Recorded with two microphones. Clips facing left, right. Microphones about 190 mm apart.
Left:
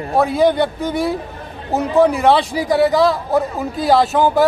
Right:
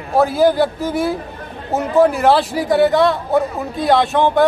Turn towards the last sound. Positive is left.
turn(degrees=0)  # may be behind; listen again after turning